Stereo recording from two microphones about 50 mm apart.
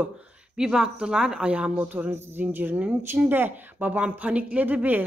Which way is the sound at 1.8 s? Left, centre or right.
Right.